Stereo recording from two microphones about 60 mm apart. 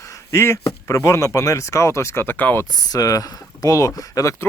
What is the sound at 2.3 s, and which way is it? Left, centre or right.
Speech, left.